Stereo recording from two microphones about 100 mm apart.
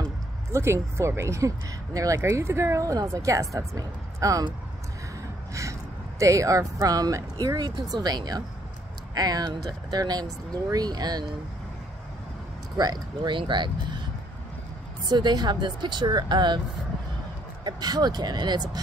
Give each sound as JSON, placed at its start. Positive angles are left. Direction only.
{"t": 0.5, "sound": "speech", "side_deg": -25}
{"t": 5.5, "sound": "speech", "side_deg": -30}
{"t": 12.7, "sound": "speech", "side_deg": -40}
{"t": 15.0, "sound": "speech", "side_deg": -45}
{"t": 17.6, "sound": "speech", "side_deg": -45}